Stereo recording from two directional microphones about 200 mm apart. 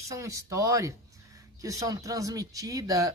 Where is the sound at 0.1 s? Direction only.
15° right (ahead or behind).